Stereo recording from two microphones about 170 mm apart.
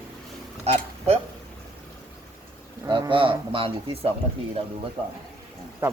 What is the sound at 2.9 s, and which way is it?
Speech, 30° right (ahead or behind).